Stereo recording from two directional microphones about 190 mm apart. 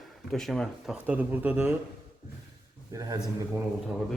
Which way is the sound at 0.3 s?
Centre (ahead or behind).